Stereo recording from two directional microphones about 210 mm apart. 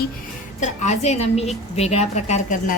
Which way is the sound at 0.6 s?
35° left (ahead or behind).